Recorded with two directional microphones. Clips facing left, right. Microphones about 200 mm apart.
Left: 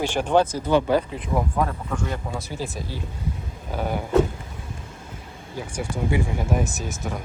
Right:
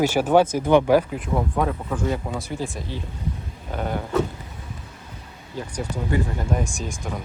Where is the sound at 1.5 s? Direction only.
5° right (ahead or behind).